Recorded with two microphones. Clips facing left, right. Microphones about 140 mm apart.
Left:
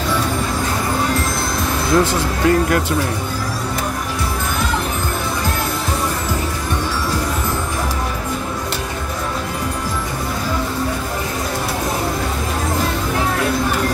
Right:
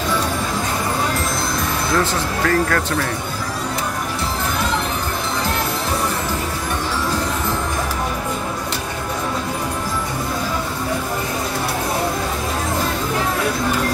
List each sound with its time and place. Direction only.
2.0 s speech: 20° left (ahead or behind)